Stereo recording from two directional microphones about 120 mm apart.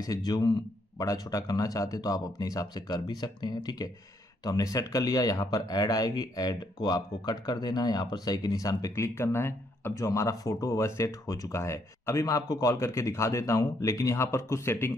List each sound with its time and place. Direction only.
0.0 s speech: 30° left (ahead or behind)